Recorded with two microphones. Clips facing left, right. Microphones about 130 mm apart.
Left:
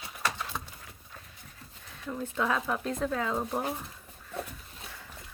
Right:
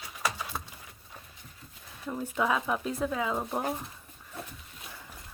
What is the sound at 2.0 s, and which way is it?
Speech, 10° right (ahead or behind).